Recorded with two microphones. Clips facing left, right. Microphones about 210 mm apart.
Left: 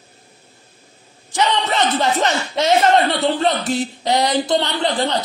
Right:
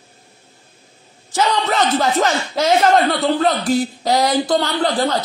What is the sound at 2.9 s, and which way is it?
A man's voice, centre (ahead or behind).